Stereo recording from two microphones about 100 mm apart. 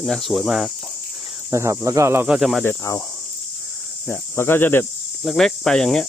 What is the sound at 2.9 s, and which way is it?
Speech, 35° left (ahead or behind).